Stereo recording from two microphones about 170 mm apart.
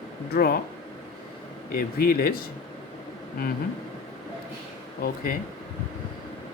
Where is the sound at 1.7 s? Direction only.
60° left (ahead or behind).